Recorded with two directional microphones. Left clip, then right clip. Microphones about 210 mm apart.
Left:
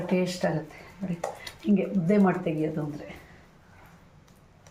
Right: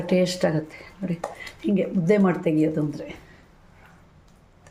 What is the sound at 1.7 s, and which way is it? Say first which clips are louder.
Speech: right 4 dB; 55° right (ahead or behind).